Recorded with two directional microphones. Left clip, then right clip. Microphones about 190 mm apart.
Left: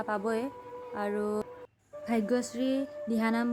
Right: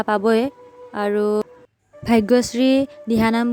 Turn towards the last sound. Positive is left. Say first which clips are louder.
# right 11 dB
turn(degrees=-40)  # may be behind; listen again after turning